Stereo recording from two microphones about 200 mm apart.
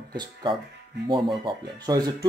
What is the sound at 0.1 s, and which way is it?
Speech, 25° right (ahead or behind).